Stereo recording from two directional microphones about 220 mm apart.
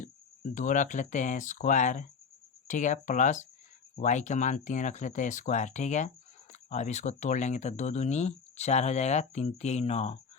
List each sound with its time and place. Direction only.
0.5 s speech: 35° left (ahead or behind)